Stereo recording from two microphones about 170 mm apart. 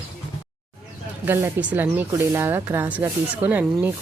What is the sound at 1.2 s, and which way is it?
Speech, 10° right (ahead or behind).